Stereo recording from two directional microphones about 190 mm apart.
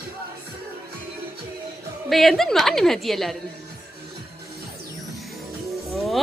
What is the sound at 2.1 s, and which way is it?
Speech, centre (ahead or behind).